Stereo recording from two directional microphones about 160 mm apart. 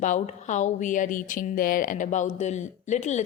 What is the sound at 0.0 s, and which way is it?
A woman's voice, 50° left (ahead or behind).